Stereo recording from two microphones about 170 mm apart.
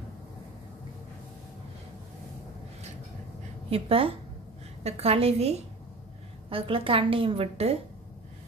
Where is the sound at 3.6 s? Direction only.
35° right (ahead or behind).